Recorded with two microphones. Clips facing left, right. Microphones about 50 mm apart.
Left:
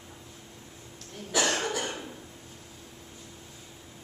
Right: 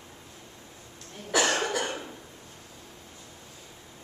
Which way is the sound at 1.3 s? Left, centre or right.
Right.